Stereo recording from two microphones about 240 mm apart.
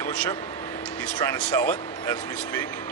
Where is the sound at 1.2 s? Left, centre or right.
Centre.